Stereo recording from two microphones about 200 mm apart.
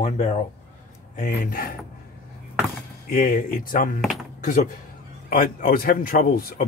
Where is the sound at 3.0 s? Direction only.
45° left (ahead or behind).